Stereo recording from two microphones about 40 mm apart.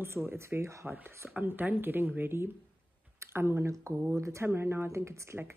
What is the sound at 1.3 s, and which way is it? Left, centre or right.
Speech, right.